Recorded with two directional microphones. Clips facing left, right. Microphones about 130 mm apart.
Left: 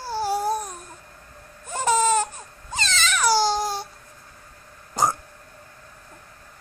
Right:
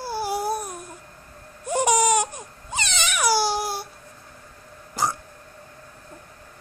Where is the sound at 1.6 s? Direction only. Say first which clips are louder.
Right 1 dB; 15° right (ahead or behind).